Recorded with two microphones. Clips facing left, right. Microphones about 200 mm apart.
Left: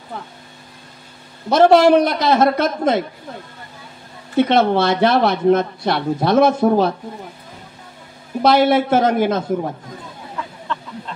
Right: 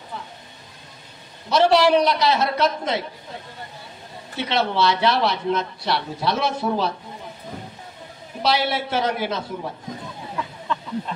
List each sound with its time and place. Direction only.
1.5 s speech: 50° left (ahead or behind)
4.4 s speech: 50° left (ahead or behind)
8.4 s speech: 50° left (ahead or behind)